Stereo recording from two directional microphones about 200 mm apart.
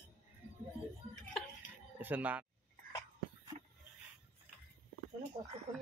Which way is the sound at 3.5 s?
35° right (ahead or behind).